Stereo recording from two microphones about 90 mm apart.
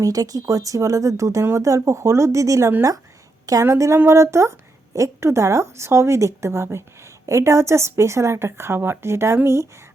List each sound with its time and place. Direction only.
0.0 s a woman's voice: 40° right (ahead or behind)
3.7 s speech: 30° right (ahead or behind)